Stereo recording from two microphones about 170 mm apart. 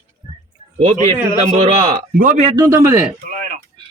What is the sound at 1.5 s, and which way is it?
Speech, 40° right (ahead or behind).